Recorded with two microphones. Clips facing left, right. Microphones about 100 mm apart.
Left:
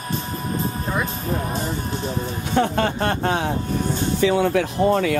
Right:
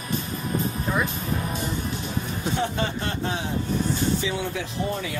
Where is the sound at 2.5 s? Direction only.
60° left (ahead or behind).